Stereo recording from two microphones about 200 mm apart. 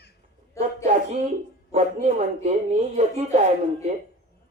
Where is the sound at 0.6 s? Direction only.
15° left (ahead or behind).